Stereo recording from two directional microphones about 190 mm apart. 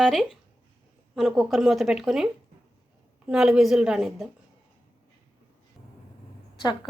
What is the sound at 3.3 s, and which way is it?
Speech, 5° right (ahead or behind).